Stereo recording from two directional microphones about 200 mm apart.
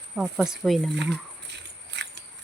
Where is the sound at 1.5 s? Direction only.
60° right (ahead or behind).